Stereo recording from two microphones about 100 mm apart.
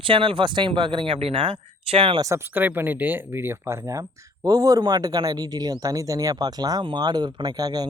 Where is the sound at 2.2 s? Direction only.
30° right (ahead or behind).